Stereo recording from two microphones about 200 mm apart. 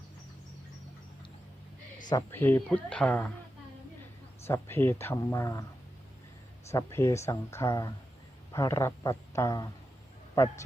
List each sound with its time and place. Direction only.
2.0 s speech: 15° left (ahead or behind)
4.4 s speech: 10° left (ahead or behind)
6.7 s speech: 15° left (ahead or behind)